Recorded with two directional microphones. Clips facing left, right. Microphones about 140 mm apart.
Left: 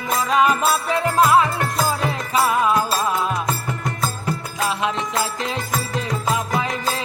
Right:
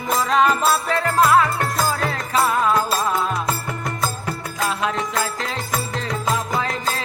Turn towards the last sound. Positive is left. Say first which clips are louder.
# left 1 dB
turn(degrees=15)  # may be behind; listen again after turning